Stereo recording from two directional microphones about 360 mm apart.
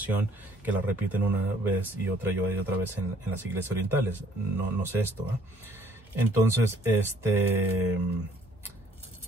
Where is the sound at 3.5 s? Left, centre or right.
Centre.